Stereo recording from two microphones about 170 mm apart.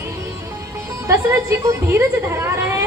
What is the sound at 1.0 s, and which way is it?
A woman's voice, 15° right (ahead or behind).